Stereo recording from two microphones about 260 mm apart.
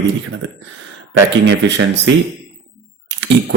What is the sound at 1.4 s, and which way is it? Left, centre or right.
A man's voice, right.